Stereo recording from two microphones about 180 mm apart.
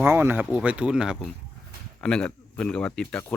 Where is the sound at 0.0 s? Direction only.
10° right (ahead or behind).